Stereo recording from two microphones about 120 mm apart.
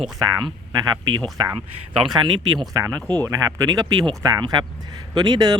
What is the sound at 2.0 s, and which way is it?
Speech, 35° right (ahead or behind).